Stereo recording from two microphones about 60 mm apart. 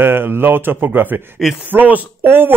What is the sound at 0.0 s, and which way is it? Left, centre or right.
Speech, right.